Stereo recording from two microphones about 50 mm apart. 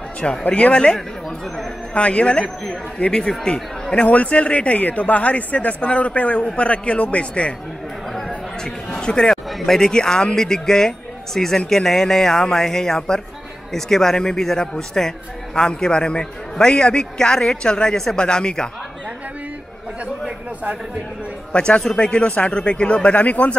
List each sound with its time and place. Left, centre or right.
0.2 s speech: left
2.0 s speech: left
2.4 s a man's voice: centre
4.0 s speech: left
8.3 s a sound: centre
9.5 s a man's voice: centre
21.5 s speech: centre